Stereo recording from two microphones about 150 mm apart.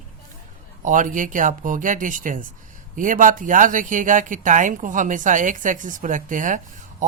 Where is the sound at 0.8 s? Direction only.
60° right (ahead or behind).